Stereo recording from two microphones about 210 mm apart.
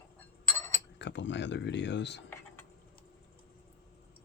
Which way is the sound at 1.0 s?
60° left (ahead or behind).